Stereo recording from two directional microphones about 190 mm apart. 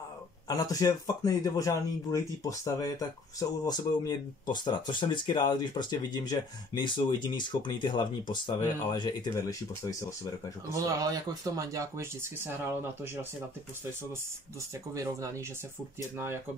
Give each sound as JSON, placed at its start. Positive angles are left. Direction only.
{"t": 0.5, "sound": "speech", "side_deg": 20}
{"t": 10.9, "sound": "speech", "side_deg": -20}
{"t": 15.0, "sound": "speech", "side_deg": -15}